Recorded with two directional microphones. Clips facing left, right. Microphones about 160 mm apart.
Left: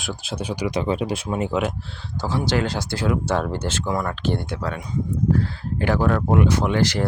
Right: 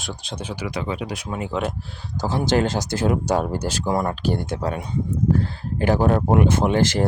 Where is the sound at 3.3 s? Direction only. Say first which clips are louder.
Right 2 dB; 15° right (ahead or behind).